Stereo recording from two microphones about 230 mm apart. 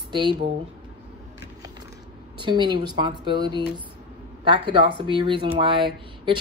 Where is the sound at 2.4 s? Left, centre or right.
Centre.